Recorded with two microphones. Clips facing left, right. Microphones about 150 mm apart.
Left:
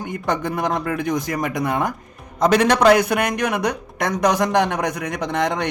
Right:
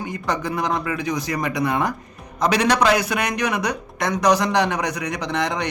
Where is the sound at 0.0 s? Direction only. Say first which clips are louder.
Left 2 dB; 55° left (ahead or behind).